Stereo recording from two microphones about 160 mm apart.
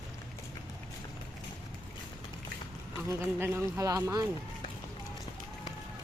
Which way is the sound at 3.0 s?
15° right (ahead or behind).